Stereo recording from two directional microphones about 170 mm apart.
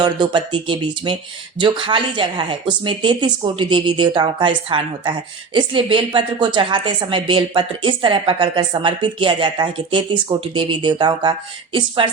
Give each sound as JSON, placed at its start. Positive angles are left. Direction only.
{"t": 0.0, "sound": "a woman's voice", "side_deg": -25}